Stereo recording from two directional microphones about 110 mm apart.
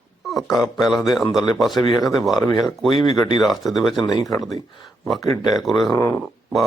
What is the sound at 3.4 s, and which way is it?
Speech, centre (ahead or behind).